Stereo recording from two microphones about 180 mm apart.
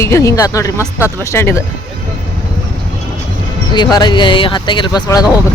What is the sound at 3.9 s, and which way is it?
Speech, 25° left (ahead or behind).